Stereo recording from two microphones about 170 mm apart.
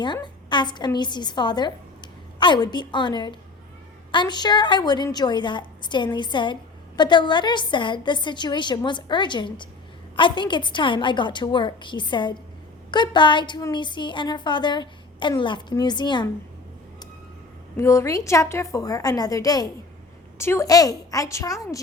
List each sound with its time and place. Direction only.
0.0 s a woman's voice: 25° left (ahead or behind)
17.7 s a woman's voice: 15° left (ahead or behind)